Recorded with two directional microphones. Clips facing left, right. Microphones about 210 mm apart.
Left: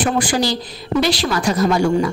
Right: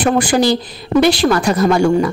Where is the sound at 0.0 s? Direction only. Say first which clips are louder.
Right 5 dB; 55° right (ahead or behind).